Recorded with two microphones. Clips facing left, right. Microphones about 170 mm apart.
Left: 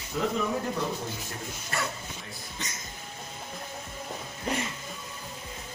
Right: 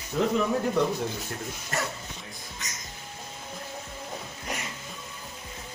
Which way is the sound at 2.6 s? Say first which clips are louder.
Left 4 dB; 30° left (ahead or behind).